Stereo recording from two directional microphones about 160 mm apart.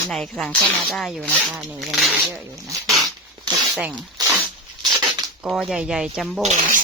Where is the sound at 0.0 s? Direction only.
Centre (ahead or behind).